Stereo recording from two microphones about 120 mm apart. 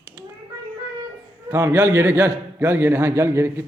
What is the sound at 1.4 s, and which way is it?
A man's voice, 20° right (ahead or behind).